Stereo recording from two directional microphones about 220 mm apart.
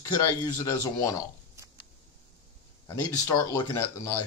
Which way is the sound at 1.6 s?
10° right (ahead or behind).